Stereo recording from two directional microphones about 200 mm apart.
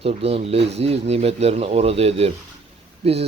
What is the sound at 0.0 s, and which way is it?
A man's voice, 30° right (ahead or behind).